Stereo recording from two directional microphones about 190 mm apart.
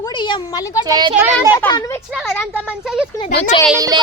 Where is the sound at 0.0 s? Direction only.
25° left (ahead or behind).